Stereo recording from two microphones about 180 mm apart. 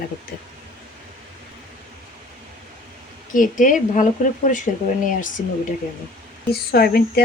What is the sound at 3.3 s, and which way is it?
Speech, 45° left (ahead or behind).